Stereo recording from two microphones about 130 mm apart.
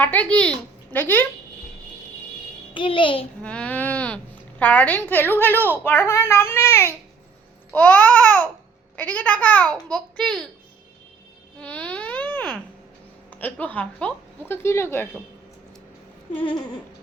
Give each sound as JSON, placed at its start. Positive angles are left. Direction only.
{"t": 0.0, "sound": "speech", "side_deg": 10}
{"t": 2.7, "sound": "a child's voice", "side_deg": 40}
{"t": 3.4, "sound": "a sound", "side_deg": 10}
{"t": 4.6, "sound": "a child's voice", "side_deg": 15}
{"t": 11.6, "sound": "a sound", "side_deg": 10}
{"t": 13.3, "sound": "speech", "side_deg": 15}